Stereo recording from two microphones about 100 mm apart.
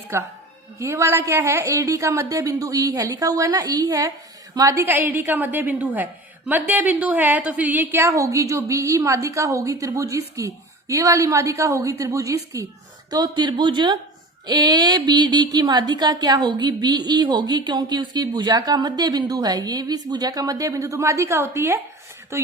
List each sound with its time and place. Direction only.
0.1 s a woman's voice: 25° right (ahead or behind)
4.8 s a woman's voice: 20° right (ahead or behind)